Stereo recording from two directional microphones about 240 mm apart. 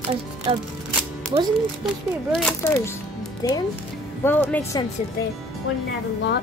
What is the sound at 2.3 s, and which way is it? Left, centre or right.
Speech, centre.